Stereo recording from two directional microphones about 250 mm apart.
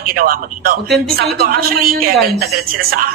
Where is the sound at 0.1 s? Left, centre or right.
Right.